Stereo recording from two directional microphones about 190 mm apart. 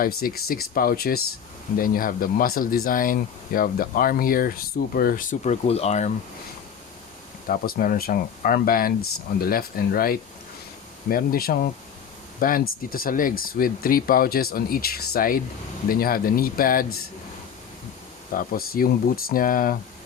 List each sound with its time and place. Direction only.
0.0 s speech: 50° left (ahead or behind); by 6.1 s 35° left (ahead or behind)
7.4 s speech: 50° left (ahead or behind)
18.3 s speech: 50° left (ahead or behind)